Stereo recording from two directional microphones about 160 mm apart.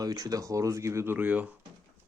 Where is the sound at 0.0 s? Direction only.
20° right (ahead or behind).